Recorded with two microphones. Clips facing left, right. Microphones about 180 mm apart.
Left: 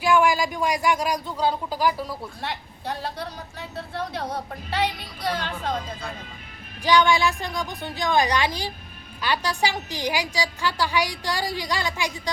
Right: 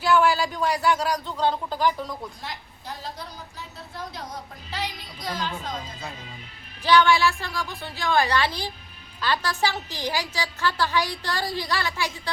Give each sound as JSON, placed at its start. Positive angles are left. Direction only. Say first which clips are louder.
{"t": 0.0, "sound": "a man's voice", "louder": "left 1 dB", "side_deg": 15}
{"t": 2.4, "sound": "a woman's voice", "louder": "left 6 dB", "side_deg": 65}
{"t": 6.8, "sound": "a woman's voice", "louder": "even", "side_deg": 15}